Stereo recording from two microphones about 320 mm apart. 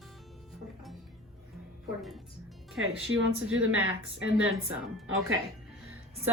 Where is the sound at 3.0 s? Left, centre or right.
Right.